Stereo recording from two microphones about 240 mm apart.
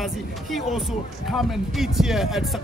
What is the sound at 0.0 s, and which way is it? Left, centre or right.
Speech, centre.